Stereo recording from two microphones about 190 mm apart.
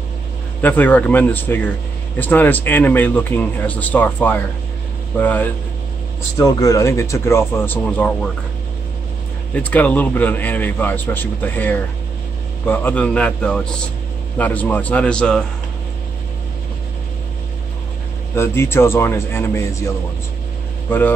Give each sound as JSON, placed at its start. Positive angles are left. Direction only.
{"t": 0.6, "sound": "a man's voice", "side_deg": 10}
{"t": 9.5, "sound": "a man's voice", "side_deg": 10}
{"t": 18.3, "sound": "a man's voice", "side_deg": 15}